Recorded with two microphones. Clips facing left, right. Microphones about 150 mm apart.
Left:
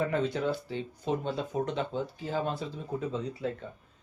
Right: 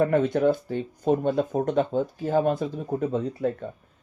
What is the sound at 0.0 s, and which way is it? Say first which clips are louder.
Speech: right 8 dB; 50° right (ahead or behind).